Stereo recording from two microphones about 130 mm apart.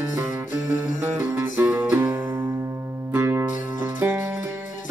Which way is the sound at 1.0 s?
15° right (ahead or behind).